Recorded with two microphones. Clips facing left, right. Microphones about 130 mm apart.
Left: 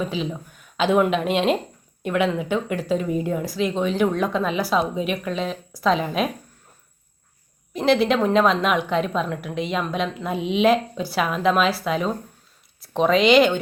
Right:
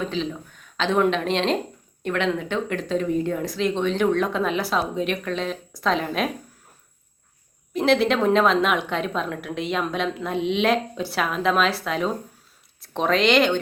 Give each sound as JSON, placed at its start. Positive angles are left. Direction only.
{"t": 0.0, "sound": "a woman's voice", "side_deg": 10}
{"t": 7.7, "sound": "a woman's voice", "side_deg": 0}